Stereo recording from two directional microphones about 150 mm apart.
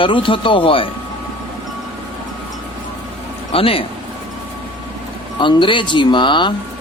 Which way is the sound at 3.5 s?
40° left (ahead or behind).